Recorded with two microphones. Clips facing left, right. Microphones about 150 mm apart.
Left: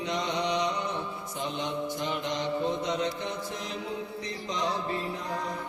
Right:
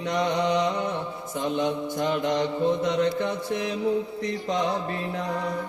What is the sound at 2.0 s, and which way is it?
Mantra, 55° right (ahead or behind).